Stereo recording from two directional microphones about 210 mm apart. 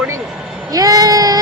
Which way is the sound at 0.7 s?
15° right (ahead or behind).